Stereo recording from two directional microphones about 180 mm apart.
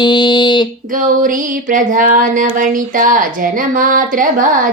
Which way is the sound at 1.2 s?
45° right (ahead or behind).